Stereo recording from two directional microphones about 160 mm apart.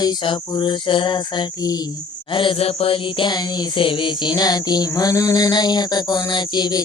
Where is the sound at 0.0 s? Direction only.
30° left (ahead or behind).